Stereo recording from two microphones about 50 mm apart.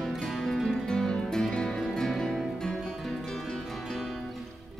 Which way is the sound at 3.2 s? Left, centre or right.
Centre.